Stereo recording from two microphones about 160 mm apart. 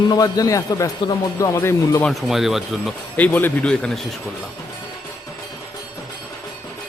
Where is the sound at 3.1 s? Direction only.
10° left (ahead or behind).